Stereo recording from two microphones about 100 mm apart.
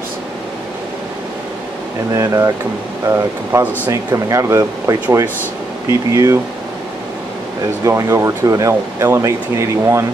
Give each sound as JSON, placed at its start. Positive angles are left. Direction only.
{"t": 2.1, "sound": "speech", "side_deg": -30}
{"t": 7.8, "sound": "speech", "side_deg": -30}